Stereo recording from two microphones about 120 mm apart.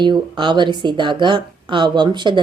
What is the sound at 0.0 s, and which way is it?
A woman's voice, 40° right (ahead or behind).